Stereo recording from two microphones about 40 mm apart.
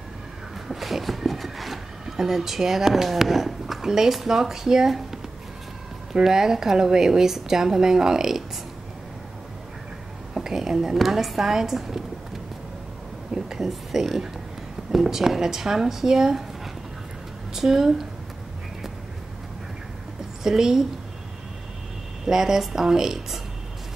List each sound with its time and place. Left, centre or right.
0.7 s speech: centre
6.2 s a woman's voice: centre
10.3 s a sound: centre
11.0 s a woman's voice: centre
13.3 s a sound: centre
13.7 s a woman's voice: centre
17.6 s a woman's voice: centre
20.4 s a woman's voice: centre
22.2 s a woman's voice: centre